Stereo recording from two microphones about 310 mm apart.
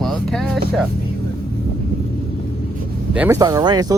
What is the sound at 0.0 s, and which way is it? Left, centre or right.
Vehicle, centre.